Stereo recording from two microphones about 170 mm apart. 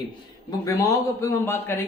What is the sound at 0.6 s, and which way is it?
A man's voice, 20° left (ahead or behind).